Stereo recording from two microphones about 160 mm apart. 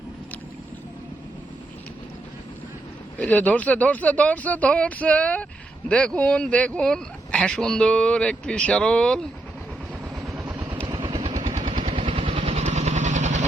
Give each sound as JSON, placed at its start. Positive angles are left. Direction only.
{"t": 3.2, "sound": "speech", "side_deg": 10}
{"t": 10.2, "sound": "vehicle", "side_deg": -5}
{"t": 10.5, "sound": "vehicle", "side_deg": -20}
{"t": 11.6, "sound": "vehicle", "side_deg": -35}